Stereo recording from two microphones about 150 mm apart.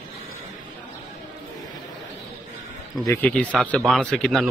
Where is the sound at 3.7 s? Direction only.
5° left (ahead or behind).